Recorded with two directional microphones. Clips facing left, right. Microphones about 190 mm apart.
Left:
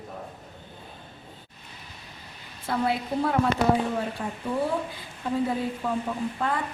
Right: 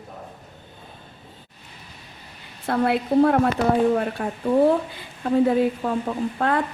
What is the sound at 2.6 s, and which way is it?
Speech, 60° right (ahead or behind).